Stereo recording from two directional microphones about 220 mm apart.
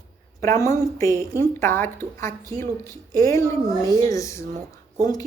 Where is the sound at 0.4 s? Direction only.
15° left (ahead or behind).